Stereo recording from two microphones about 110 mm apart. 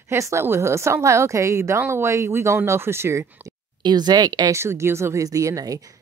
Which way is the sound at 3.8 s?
40° right (ahead or behind).